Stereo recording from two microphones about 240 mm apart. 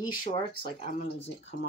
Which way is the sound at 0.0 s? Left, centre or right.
Centre.